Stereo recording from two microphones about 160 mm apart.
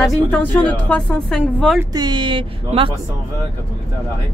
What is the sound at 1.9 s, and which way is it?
Speech, 30° right (ahead or behind).